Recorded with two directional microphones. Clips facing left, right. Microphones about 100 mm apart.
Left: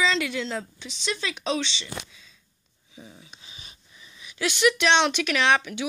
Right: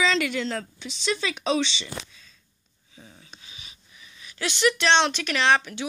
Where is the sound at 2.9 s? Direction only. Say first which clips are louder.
Left 3 dB; 15° left (ahead or behind).